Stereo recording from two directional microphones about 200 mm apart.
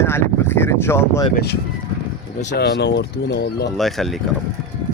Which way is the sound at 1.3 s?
55° left (ahead or behind).